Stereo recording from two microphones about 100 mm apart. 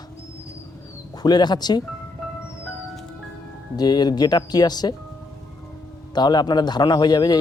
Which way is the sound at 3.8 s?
45° left (ahead or behind).